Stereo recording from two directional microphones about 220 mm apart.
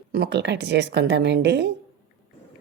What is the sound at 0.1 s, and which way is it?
A woman's voice, 50° right (ahead or behind).